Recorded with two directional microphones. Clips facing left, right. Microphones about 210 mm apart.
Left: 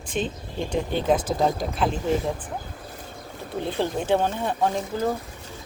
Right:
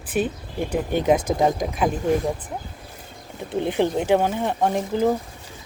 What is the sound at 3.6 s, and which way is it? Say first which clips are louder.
Speech: right 4 dB; 15° right (ahead or behind).